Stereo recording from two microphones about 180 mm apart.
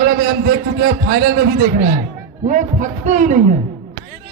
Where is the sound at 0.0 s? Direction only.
55° right (ahead or behind).